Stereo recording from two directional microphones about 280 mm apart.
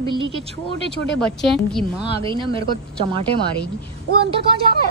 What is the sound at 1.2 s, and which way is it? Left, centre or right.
Speech, centre.